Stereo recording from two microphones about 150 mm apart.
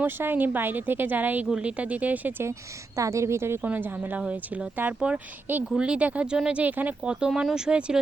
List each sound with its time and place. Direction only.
0.0 s speech: 15° right (ahead or behind)